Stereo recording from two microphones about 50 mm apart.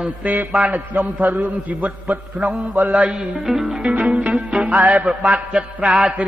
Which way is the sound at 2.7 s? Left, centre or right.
Right.